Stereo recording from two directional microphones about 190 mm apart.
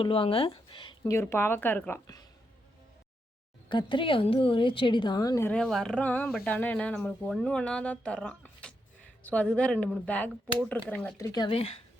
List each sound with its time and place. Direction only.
0.0 s speech: 30° left (ahead or behind)
3.7 s speech: 25° left (ahead or behind)
5.5 s speech: centre (ahead or behind)
11.3 s speech: 25° left (ahead or behind)